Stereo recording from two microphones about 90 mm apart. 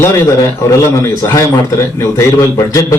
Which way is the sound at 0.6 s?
30° left (ahead or behind).